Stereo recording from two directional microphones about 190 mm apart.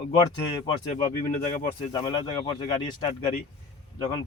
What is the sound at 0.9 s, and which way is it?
Speech, 50° left (ahead or behind).